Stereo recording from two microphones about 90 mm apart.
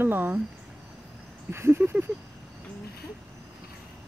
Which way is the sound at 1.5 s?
25° right (ahead or behind).